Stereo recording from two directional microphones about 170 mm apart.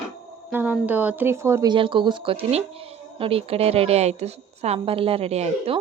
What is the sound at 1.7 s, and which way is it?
Speech, 30° right (ahead or behind).